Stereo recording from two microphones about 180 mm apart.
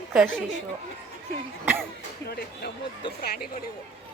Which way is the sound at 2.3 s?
60° left (ahead or behind).